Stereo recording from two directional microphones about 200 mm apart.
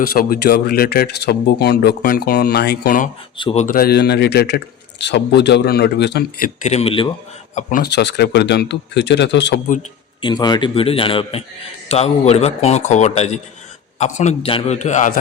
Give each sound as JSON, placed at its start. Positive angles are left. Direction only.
{"t": 0.0, "sound": "speech", "side_deg": 45}
{"t": 3.3, "sound": "speech", "side_deg": 30}
{"t": 3.8, "sound": "a man's voice", "side_deg": 50}
{"t": 6.6, "sound": "speech", "side_deg": 30}
{"t": 7.5, "sound": "speech", "side_deg": 40}
{"t": 7.9, "sound": "a man's voice", "side_deg": 55}
{"t": 10.2, "sound": "a man's voice", "side_deg": 20}